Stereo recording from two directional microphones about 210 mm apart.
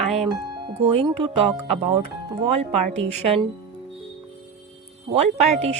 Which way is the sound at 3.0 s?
30° right (ahead or behind).